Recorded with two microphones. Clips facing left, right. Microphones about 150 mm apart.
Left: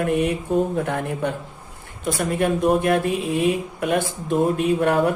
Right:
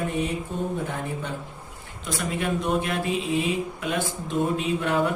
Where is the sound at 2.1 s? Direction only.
50° left (ahead or behind).